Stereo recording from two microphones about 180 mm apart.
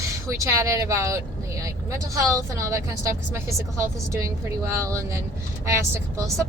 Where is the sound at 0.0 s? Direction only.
15° right (ahead or behind).